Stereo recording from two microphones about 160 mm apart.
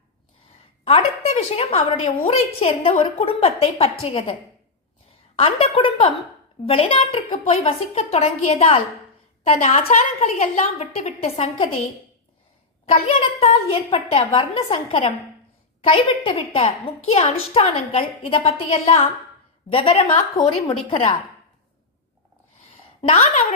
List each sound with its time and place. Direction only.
0.9 s a woman's voice: 40° left (ahead or behind)
5.4 s a woman's voice: 35° left (ahead or behind)
9.6 s a woman's voice: 50° left (ahead or behind)
13.1 s a woman's voice: 35° left (ahead or behind)
20.3 s a woman's voice: 25° left (ahead or behind)
23.0 s a woman's voice: 45° left (ahead or behind)